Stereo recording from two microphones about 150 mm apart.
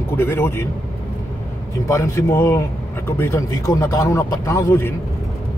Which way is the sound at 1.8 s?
20° left (ahead or behind).